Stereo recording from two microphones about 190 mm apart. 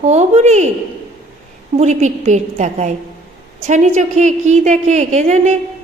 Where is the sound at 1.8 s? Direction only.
40° right (ahead or behind).